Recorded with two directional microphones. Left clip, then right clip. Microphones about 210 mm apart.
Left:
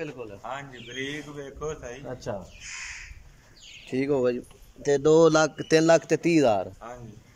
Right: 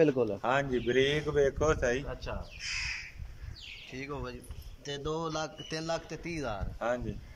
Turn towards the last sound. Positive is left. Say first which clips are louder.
# left 16 dB
turn(degrees=45)  # may be behind; listen again after turning